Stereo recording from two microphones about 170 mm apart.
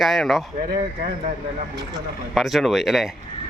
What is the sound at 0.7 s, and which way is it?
Speech, 50° right (ahead or behind).